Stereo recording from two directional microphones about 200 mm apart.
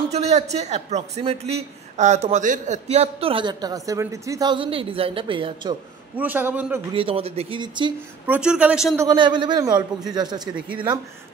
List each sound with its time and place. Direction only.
0.1 s a man's voice: 35° right (ahead or behind)
6.1 s a man's voice: 10° right (ahead or behind)
6.9 s speech: 25° right (ahead or behind)
8.3 s speech: 5° right (ahead or behind)
8.9 s speech: 20° right (ahead or behind)